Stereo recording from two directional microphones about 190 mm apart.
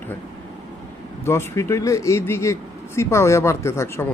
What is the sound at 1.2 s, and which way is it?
A man's voice, 15° left (ahead or behind).